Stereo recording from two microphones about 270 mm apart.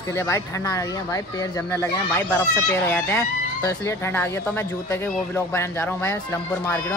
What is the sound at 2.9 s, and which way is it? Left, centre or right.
Speech, centre.